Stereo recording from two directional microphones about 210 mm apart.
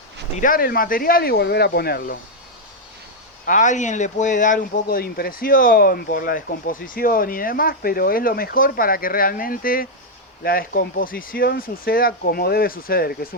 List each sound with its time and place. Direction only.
0.3 s speech: 40° left (ahead or behind)
3.4 s speech: 35° left (ahead or behind)